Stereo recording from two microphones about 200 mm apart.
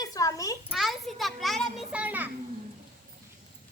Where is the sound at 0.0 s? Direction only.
15° left (ahead or behind).